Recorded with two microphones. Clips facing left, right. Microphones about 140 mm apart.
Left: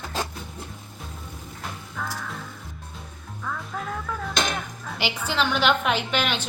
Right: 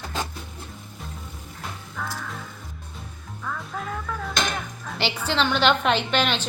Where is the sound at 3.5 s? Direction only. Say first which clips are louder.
Even; centre (ahead or behind).